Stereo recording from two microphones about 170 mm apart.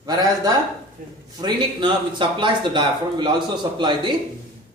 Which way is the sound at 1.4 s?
25° right (ahead or behind).